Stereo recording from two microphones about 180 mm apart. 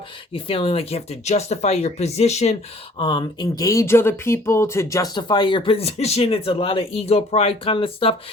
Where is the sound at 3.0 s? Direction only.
25° left (ahead or behind).